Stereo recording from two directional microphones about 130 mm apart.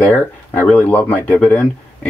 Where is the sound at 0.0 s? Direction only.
10° left (ahead or behind).